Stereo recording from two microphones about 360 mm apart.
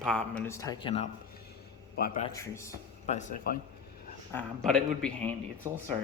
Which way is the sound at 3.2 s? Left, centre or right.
Left.